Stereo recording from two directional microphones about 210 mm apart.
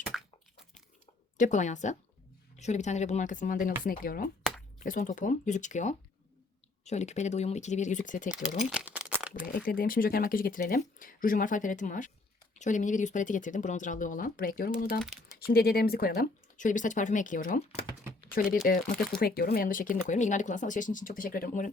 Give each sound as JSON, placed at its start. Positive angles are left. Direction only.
{"t": 1.4, "sound": "speech", "side_deg": 35}
{"t": 8.7, "sound": "crumpling", "side_deg": -5}
{"t": 9.6, "sound": "speech", "side_deg": 40}
{"t": 15.0, "sound": "typing", "side_deg": 0}
{"t": 15.4, "sound": "speech", "side_deg": 45}